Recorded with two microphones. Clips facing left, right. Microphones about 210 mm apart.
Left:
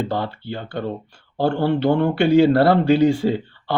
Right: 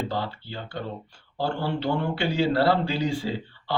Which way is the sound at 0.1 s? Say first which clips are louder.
Left 6 dB; 55° left (ahead or behind).